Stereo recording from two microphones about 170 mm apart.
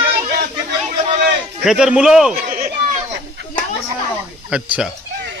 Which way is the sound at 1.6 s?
5° right (ahead or behind).